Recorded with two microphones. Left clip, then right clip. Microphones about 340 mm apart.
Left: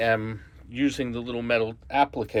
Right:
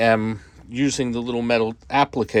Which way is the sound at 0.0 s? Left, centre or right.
Centre.